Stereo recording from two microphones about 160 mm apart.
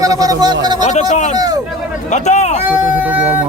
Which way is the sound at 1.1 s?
45° left (ahead or behind).